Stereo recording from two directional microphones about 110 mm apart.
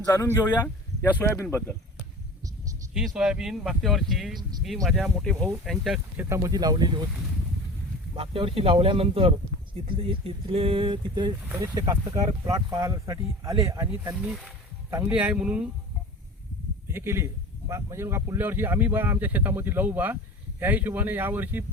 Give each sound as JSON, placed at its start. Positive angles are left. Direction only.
{"t": 0.0, "sound": "speech", "side_deg": 30}
{"t": 3.2, "sound": "speech", "side_deg": -5}
{"t": 6.1, "sound": "speech", "side_deg": -25}
{"t": 8.1, "sound": "a man's voice", "side_deg": -55}
{"t": 14.2, "sound": "speech", "side_deg": -10}
{"t": 16.9, "sound": "a man's voice", "side_deg": -25}